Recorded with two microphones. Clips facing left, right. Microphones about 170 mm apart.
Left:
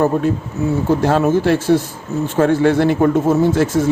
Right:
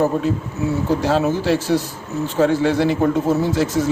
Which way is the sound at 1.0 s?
55° left (ahead or behind).